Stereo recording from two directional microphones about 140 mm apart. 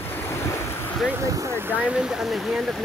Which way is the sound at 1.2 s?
20° right (ahead or behind).